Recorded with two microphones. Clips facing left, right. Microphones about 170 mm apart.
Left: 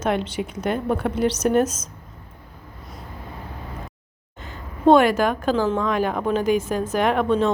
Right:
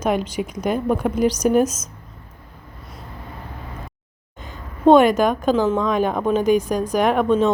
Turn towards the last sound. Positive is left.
turn(degrees=-15)  # may be behind; listen again after turning